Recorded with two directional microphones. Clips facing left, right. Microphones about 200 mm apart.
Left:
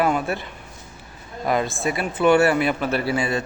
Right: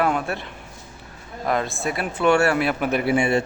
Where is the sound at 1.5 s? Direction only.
Centre (ahead or behind).